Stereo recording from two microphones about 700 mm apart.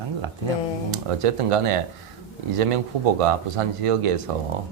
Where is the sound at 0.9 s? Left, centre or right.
Right.